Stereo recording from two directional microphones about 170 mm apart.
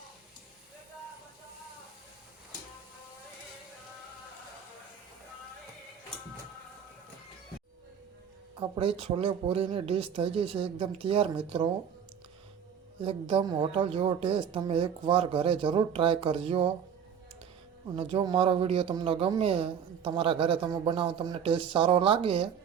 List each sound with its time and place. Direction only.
8.7 s a woman's voice: 30° right (ahead or behind)
13.1 s a woman's voice: 30° right (ahead or behind)
17.9 s a woman's voice: 30° right (ahead or behind)